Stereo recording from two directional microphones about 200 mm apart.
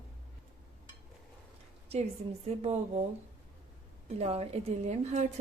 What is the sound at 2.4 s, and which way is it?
Speech, 30° right (ahead or behind).